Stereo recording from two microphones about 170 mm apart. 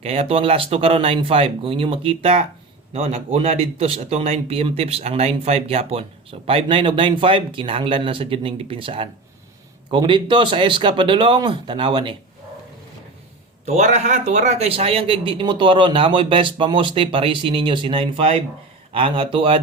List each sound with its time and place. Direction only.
0.0 s speech: 35° right (ahead or behind)
13.7 s speech: 45° right (ahead or behind)